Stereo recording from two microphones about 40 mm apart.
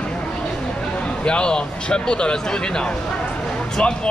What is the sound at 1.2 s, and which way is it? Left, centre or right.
Speech, left.